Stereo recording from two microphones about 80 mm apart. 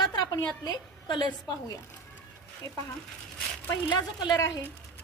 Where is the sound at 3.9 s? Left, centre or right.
Left.